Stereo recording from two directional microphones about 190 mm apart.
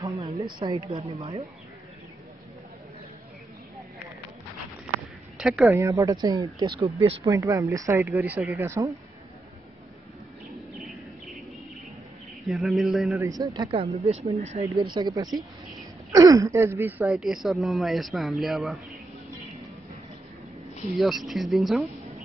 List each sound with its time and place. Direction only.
0.0 s a sound: 15° right (ahead or behind)
0.6 s a woman's voice: 25° right (ahead or behind)
5.4 s speech: centre (ahead or behind)
5.7 s speech: 15° right (ahead or behind)
10.5 s bird: centre (ahead or behind)
12.4 s speech: centre (ahead or behind)
13.2 s a woman's voice: 20° right (ahead or behind); by 14.7 s 35° right (ahead or behind)
15.0 s a woman's voice: 20° right (ahead or behind); by 18.9 s centre (ahead or behind)
21.0 s speech: centre (ahead or behind)